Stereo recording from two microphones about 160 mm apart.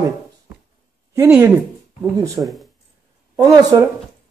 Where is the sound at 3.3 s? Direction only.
25° right (ahead or behind).